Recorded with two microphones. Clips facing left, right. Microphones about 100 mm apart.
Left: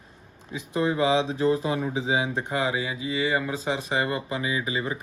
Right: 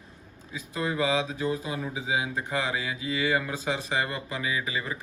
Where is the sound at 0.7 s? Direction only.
20° left (ahead or behind).